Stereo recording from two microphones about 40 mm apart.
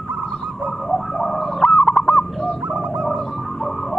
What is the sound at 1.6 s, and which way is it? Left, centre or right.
Fowl, left.